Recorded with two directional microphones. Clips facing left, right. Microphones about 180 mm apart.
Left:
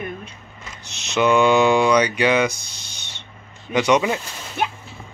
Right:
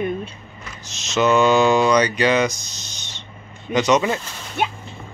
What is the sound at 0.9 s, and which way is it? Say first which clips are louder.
Speech: right 1 dB; 60° left (ahead or behind).